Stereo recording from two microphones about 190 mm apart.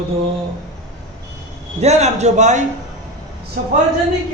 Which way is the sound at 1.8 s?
35° right (ahead or behind).